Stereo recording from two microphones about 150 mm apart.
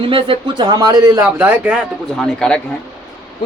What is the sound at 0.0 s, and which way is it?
A man's voice, 35° right (ahead or behind).